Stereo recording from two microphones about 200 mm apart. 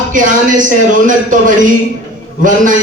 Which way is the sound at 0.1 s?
40° right (ahead or behind).